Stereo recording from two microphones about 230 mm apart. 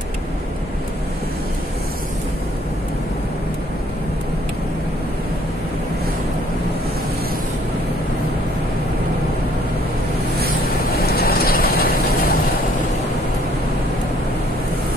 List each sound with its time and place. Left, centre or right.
10.8 s vehicle: left